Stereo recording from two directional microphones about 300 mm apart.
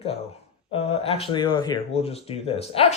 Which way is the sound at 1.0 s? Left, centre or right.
Centre.